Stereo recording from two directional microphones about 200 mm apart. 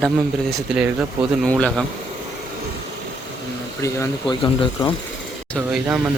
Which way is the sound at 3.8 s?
15° left (ahead or behind).